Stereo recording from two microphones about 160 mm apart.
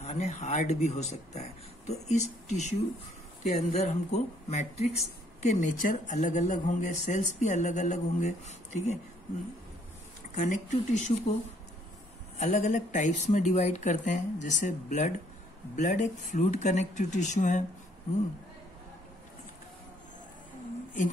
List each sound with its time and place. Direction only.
0.0 s a woman's voice: 45° left (ahead or behind)
10.3 s a woman's voice: 50° left (ahead or behind)
12.4 s a woman's voice: 45° left (ahead or behind)